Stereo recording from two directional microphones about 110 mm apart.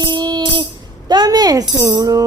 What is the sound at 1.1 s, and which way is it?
Tambourine, 40° right (ahead or behind).